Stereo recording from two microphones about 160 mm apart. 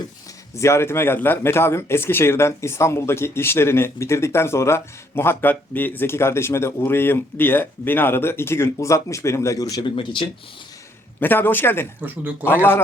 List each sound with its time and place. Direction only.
0.5 s speech: 15° left (ahead or behind)
11.2 s speech: 10° left (ahead or behind)
12.0 s speech: 10° right (ahead or behind)